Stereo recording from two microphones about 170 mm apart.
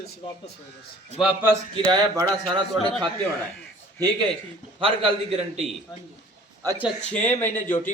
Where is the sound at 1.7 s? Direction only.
25° right (ahead or behind).